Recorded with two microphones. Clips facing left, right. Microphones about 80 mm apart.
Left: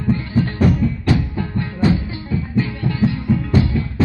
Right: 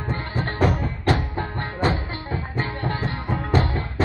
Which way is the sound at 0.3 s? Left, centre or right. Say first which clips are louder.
Left 3 dB; right.